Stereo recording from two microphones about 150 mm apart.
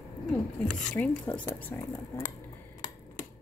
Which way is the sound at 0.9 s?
10° left (ahead or behind).